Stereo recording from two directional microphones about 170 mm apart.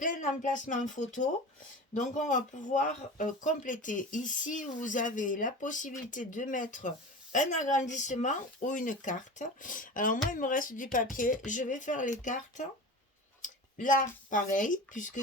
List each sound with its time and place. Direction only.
0.0 s speech: 50° left (ahead or behind)